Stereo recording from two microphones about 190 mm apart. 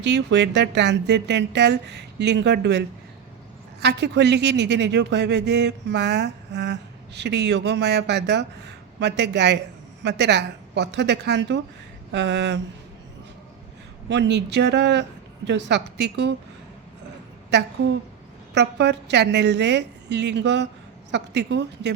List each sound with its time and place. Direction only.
0.0 s speech: 65° right (ahead or behind)
14.1 s speech: 65° right (ahead or behind)
17.5 s speech: 65° right (ahead or behind)